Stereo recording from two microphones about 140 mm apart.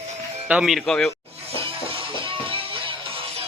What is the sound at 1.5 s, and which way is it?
Music, 40° right (ahead or behind).